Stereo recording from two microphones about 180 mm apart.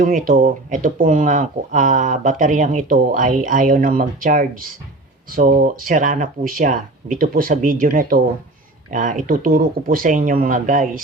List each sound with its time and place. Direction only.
0.0 s speech: 50° right (ahead or behind)